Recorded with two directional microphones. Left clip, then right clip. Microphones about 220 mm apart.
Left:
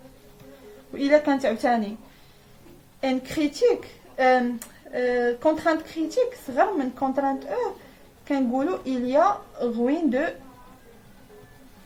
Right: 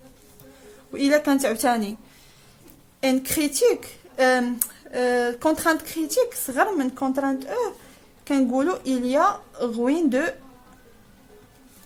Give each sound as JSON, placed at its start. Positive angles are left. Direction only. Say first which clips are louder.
{"t": 0.9, "sound": "speech", "louder": "even", "side_deg": -50}
{"t": 3.0, "sound": "speech", "louder": "right 2 dB", "side_deg": -50}